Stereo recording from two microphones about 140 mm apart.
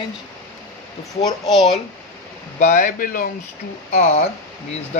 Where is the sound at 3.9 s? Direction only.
55° left (ahead or behind).